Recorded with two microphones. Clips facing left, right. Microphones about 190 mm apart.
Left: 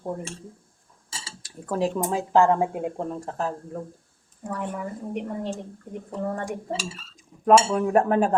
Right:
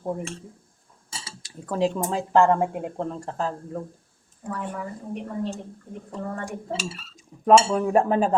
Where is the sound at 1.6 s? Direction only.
5° left (ahead or behind).